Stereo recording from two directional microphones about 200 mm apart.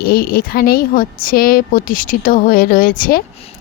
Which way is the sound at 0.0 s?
50° left (ahead or behind).